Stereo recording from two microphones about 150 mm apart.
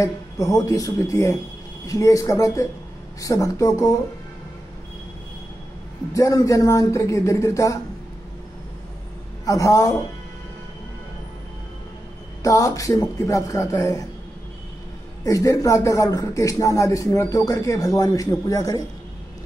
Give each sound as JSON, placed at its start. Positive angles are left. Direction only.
{"t": 0.0, "sound": "speech", "side_deg": 20}
{"t": 6.1, "sound": "speech", "side_deg": 20}
{"t": 9.5, "sound": "speech", "side_deg": 20}
{"t": 12.4, "sound": "speech", "side_deg": 20}
{"t": 15.2, "sound": "speech", "side_deg": 20}